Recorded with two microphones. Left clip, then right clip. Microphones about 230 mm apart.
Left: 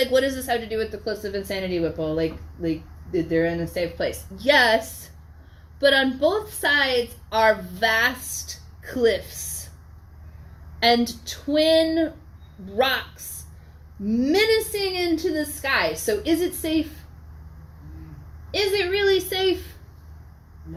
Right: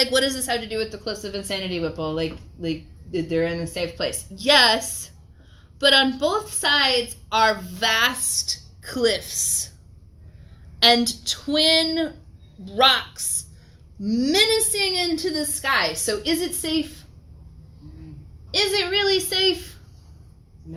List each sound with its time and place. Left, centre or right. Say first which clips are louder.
0.0 s speech: even; right
5.8 s speech: right 1 dB; right
10.8 s speech: right 2 dB; right
18.5 s speech: right 1 dB; centre